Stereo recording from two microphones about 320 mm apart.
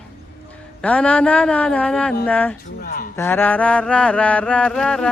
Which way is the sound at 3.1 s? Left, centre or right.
Centre.